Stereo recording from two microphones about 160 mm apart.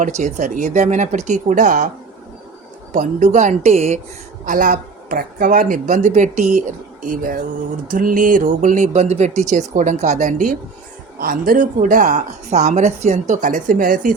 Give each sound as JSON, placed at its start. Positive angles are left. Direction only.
{"t": 0.0, "sound": "a woman's voice", "side_deg": -50}
{"t": 2.9, "sound": "a woman's voice", "side_deg": -50}
{"t": 4.4, "sound": "a woman's voice", "side_deg": -55}